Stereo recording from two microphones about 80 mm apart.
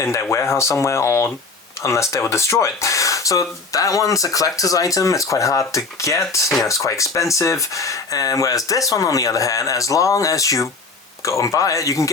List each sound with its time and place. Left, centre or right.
0.0 s speech: left